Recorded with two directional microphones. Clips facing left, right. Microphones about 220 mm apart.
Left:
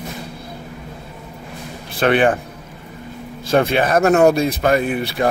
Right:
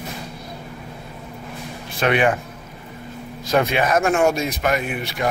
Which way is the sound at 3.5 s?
30° left (ahead or behind).